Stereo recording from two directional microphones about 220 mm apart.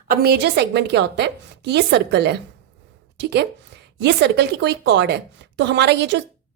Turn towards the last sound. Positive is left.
turn(degrees=-50)  # may be behind; listen again after turning